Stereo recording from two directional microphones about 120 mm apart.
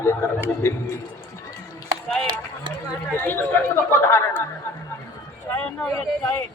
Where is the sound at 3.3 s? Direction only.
15° left (ahead or behind).